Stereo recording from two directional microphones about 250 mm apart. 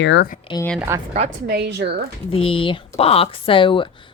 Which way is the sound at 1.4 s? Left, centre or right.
Right.